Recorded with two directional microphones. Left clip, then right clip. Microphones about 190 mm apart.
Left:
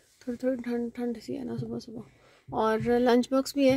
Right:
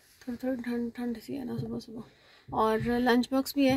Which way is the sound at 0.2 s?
55° left (ahead or behind).